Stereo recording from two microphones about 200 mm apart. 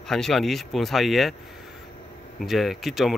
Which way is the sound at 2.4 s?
Centre (ahead or behind).